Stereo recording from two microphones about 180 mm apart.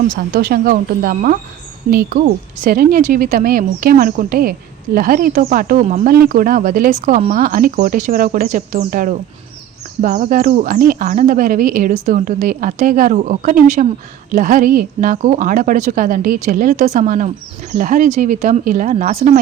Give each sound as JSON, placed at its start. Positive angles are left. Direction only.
{"t": 0.1, "sound": "speech", "side_deg": -55}